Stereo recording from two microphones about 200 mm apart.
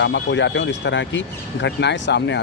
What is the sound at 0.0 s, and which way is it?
Speech, 65° left (ahead or behind).